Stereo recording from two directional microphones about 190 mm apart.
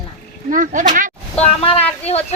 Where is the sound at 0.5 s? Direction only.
45° right (ahead or behind).